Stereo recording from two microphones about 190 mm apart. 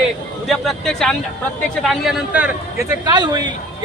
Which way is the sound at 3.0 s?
20° right (ahead or behind).